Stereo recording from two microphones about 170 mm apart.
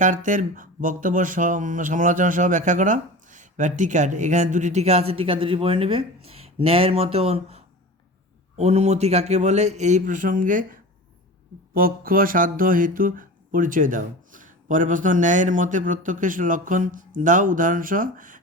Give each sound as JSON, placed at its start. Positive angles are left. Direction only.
{"t": 0.0, "sound": "a man's voice", "side_deg": -50}
{"t": 11.7, "sound": "speech", "side_deg": -60}